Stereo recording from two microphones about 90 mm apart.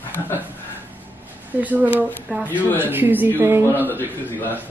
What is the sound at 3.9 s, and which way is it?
Speech, 20° left (ahead or behind).